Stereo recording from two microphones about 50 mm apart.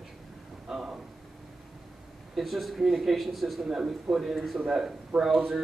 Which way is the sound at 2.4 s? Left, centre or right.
Centre.